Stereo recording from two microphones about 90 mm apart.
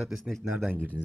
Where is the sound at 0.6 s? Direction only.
20° right (ahead or behind).